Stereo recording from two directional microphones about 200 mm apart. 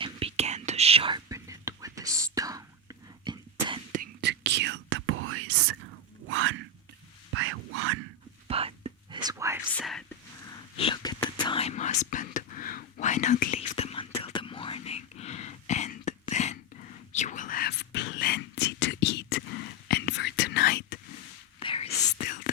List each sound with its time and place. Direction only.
0.0 s whispering: 30° right (ahead or behind)
3.3 s a sound: 20° right (ahead or behind)
3.9 s whispering: 50° right (ahead or behind); by 5.6 s 90° right
6.2 s a sound: 85° right
8.4 s whispering: 30° right (ahead or behind); by 9.6 s 15° right (ahead or behind)
9.7 s whispering: centre (ahead or behind)
10.8 s whispering: 25° left (ahead or behind); by 20.8 s 50° left (ahead or behind)
21.6 s whispering: 30° left (ahead or behind)